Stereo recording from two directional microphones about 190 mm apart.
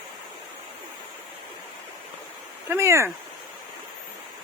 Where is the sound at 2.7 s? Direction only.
15° right (ahead or behind).